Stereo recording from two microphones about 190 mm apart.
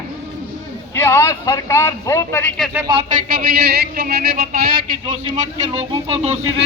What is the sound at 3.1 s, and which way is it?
A man's voice, 50° right (ahead or behind).